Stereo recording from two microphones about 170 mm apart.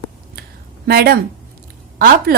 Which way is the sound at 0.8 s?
65° right (ahead or behind).